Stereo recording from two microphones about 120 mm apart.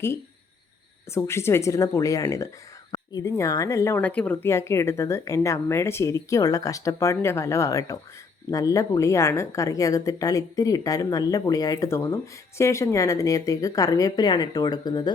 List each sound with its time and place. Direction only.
1.1 s a woman's voice: 20° left (ahead or behind)
4.0 s a woman's voice: 10° left (ahead or behind); by 15.1 s 35° left (ahead or behind)